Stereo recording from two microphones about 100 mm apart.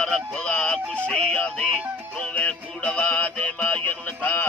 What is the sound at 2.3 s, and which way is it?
Music, 15° left (ahead or behind).